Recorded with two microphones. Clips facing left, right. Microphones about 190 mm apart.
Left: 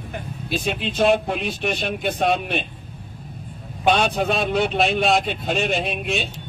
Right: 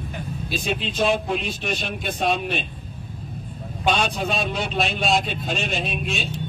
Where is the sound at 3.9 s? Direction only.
55° left (ahead or behind).